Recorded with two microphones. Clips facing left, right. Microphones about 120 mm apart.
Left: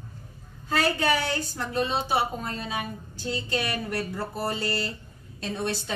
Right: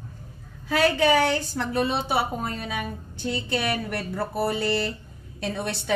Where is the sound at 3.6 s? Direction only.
65° right (ahead or behind).